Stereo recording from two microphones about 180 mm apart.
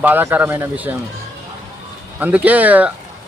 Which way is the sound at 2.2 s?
10° right (ahead or behind).